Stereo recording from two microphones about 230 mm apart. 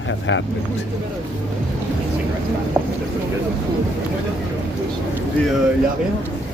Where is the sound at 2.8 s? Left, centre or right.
Centre.